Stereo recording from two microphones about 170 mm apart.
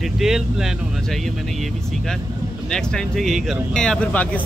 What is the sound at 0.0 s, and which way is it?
Speech, centre (ahead or behind).